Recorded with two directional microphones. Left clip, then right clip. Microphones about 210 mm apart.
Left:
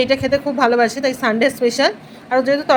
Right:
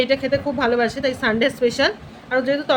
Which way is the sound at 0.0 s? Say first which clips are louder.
Left 3 dB; 10° left (ahead or behind).